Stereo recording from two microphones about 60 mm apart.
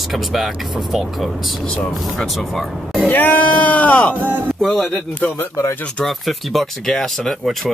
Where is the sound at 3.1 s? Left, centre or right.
Left.